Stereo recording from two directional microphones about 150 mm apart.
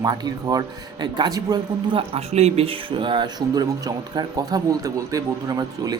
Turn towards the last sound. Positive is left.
turn(degrees=-25)  # may be behind; listen again after turning